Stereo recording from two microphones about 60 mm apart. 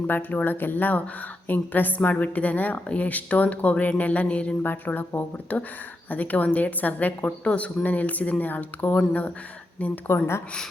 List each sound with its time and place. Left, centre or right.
0.1 s a woman's voice: left